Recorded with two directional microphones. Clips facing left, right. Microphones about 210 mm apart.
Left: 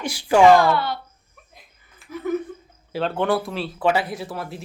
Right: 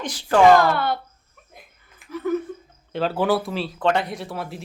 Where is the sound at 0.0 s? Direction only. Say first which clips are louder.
Left 1 dB; 10° left (ahead or behind).